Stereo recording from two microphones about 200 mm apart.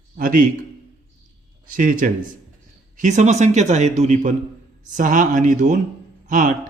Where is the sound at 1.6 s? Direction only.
40° right (ahead or behind).